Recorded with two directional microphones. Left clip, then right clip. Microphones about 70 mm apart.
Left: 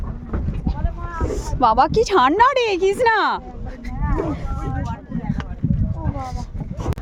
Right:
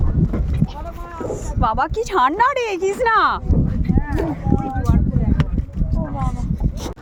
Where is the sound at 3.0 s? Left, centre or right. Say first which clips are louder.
Right 4 dB; left.